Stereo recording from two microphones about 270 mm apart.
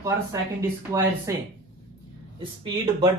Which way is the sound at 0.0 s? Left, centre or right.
Centre.